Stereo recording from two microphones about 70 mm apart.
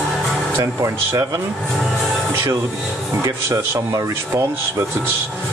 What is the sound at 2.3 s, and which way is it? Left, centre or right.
Speech, right.